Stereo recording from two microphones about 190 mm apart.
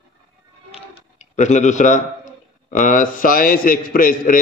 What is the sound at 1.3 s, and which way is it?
A man's voice, 40° left (ahead or behind).